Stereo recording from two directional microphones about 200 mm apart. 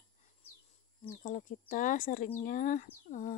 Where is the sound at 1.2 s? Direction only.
40° left (ahead or behind).